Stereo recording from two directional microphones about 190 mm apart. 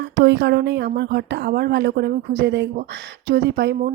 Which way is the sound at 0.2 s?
70° right (ahead or behind).